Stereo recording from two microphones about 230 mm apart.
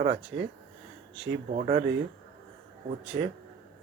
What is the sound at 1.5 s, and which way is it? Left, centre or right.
Speech, right.